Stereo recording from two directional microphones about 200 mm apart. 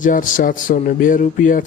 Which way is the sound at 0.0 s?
40° left (ahead or behind).